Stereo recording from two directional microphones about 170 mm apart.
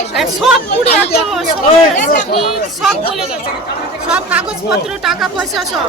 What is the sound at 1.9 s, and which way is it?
Speech, 45° left (ahead or behind).